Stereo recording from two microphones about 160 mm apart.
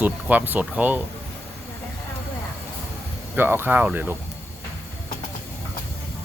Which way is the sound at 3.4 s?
15° right (ahead or behind).